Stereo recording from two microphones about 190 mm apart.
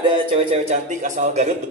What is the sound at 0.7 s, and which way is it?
Speech, 40° right (ahead or behind).